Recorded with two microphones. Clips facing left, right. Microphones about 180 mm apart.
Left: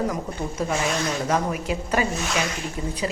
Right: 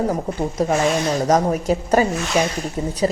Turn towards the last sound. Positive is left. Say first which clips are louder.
# right 7 dB
turn(degrees=-35)  # may be behind; listen again after turning